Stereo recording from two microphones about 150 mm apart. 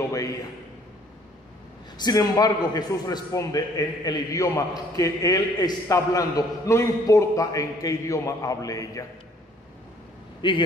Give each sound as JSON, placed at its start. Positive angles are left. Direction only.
{"t": 0.1, "sound": "a man's voice", "side_deg": 20}
{"t": 2.0, "sound": "a man's voice", "side_deg": 25}
{"t": 10.4, "sound": "a man's voice", "side_deg": 35}